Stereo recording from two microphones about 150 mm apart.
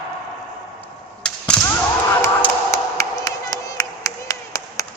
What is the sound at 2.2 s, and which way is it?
Clapping, 20° left (ahead or behind).